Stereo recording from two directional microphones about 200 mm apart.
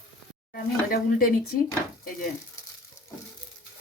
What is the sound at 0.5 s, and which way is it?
Speech, 50° left (ahead or behind).